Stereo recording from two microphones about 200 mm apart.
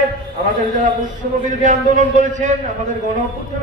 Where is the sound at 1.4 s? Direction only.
40° right (ahead or behind).